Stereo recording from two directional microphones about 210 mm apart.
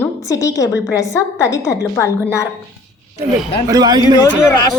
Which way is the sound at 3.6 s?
20° right (ahead or behind).